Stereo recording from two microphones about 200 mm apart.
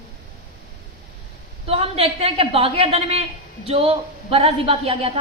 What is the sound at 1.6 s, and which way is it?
A woman's voice, 30° right (ahead or behind).